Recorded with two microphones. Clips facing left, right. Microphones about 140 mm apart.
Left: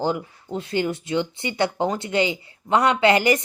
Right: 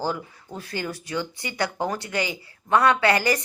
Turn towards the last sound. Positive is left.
turn(degrees=20)  # may be behind; listen again after turning